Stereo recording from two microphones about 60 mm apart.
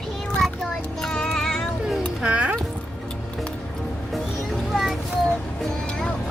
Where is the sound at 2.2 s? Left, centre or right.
Centre.